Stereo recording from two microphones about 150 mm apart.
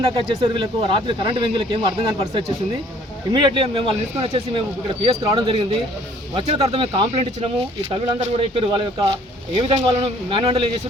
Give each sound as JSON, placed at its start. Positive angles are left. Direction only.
{"t": 0.2, "sound": "speech", "side_deg": -40}
{"t": 9.6, "sound": "speech", "side_deg": -45}